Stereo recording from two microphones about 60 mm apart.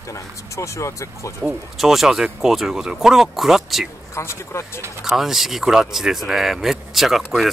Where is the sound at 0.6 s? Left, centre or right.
Left.